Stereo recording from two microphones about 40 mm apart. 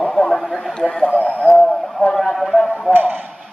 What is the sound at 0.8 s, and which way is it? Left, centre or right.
Speech, left.